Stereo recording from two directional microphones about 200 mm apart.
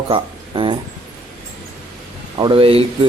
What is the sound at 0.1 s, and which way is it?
Speech, 25° right (ahead or behind).